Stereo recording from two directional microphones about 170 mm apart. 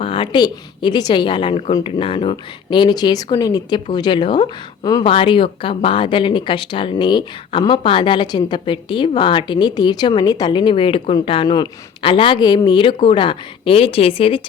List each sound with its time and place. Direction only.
0.0 s speech: 30° left (ahead or behind)